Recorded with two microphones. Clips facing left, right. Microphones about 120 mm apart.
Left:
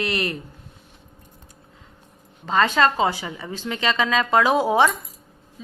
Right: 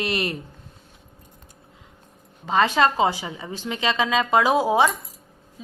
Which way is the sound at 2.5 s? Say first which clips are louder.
Even; 15° right (ahead or behind).